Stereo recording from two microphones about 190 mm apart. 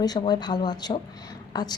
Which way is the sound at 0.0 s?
20° left (ahead or behind).